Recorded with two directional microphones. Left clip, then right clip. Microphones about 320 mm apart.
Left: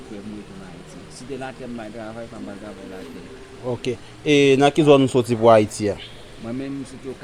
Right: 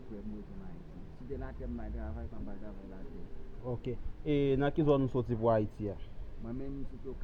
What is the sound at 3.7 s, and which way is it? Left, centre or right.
Speech, left.